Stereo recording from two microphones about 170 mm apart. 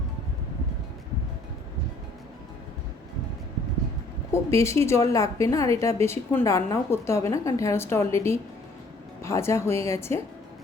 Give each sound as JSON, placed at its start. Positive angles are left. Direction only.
{"t": 4.3, "sound": "a woman's voice", "side_deg": 15}